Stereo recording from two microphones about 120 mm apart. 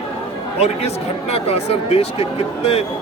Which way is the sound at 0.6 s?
60° left (ahead or behind).